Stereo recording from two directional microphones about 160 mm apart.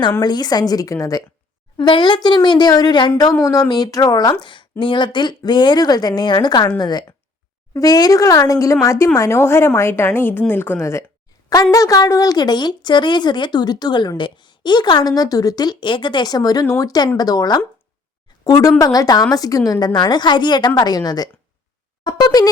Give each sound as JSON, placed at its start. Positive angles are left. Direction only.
{"t": 0.2, "sound": "a woman's voice", "side_deg": 25}